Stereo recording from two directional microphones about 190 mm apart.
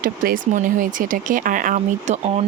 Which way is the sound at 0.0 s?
45° right (ahead or behind).